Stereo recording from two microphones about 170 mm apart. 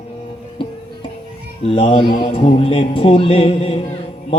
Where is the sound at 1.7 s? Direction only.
35° left (ahead or behind).